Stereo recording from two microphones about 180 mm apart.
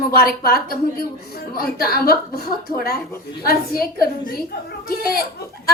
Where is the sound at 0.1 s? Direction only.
55° left (ahead or behind).